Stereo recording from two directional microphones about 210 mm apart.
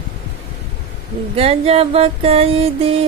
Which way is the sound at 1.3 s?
30° right (ahead or behind).